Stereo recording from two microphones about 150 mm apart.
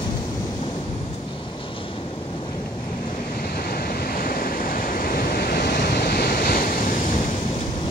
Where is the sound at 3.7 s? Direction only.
80° left.